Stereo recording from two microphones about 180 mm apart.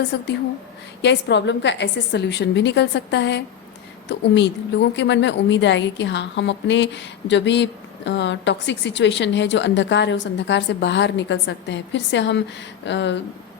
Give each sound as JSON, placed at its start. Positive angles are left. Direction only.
{"t": 0.1, "sound": "a woman's voice", "side_deg": 70}